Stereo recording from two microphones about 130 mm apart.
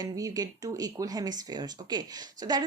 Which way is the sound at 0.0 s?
30° right (ahead or behind).